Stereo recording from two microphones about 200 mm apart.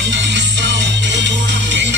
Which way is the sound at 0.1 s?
60° right (ahead or behind).